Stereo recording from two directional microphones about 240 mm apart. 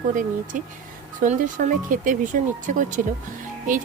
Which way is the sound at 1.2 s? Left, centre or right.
Right.